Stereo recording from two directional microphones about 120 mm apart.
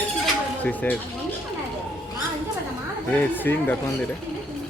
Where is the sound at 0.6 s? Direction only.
15° left (ahead or behind).